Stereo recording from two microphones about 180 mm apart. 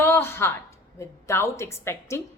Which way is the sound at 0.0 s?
15° left (ahead or behind).